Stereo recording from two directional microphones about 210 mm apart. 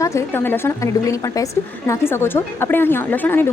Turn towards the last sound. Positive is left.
turn(degrees=10)  # may be behind; listen again after turning